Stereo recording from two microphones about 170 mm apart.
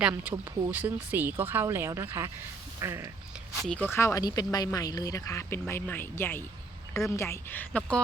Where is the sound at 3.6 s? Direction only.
5° left (ahead or behind).